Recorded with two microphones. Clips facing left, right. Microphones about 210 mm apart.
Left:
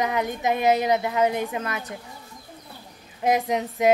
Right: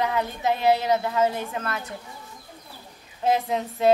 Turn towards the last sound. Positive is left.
turn(degrees=15)  # may be behind; listen again after turning